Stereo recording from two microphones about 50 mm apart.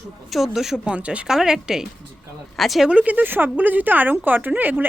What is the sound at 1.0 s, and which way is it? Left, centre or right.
Speech, right.